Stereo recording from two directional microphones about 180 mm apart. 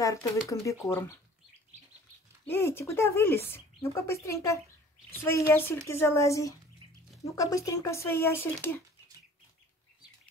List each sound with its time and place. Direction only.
0.0 s speech: 20° left (ahead or behind)
2.4 s speech: 15° left (ahead or behind)